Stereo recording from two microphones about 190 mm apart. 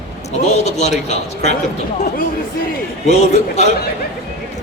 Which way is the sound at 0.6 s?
35° left (ahead or behind).